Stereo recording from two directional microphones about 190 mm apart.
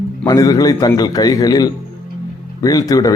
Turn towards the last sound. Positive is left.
turn(degrees=20)  # may be behind; listen again after turning